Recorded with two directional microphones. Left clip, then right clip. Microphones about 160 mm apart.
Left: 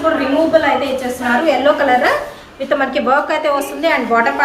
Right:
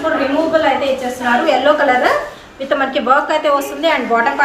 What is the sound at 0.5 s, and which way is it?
A woman's voice, centre (ahead or behind).